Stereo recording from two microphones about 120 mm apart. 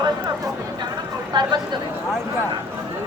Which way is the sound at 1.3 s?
40° right (ahead or behind).